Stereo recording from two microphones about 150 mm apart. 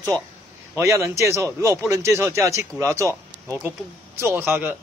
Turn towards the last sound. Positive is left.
turn(degrees=-15)  # may be behind; listen again after turning